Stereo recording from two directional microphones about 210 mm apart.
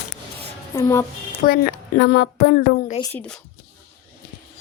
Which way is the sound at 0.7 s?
15° left (ahead or behind).